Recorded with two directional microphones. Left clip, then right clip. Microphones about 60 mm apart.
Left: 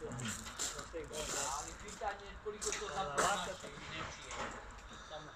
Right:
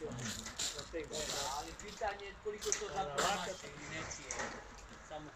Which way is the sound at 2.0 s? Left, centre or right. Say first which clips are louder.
Right 2 dB; centre.